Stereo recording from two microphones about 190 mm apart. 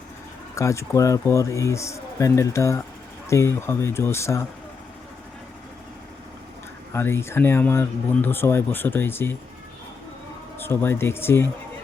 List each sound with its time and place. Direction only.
0.5 s speech: 15° left (ahead or behind)
6.9 s speech: 15° left (ahead or behind)
10.6 s speech: 10° left (ahead or behind)